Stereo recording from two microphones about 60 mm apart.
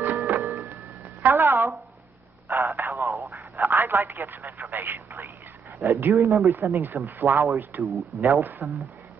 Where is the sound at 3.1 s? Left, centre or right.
Right.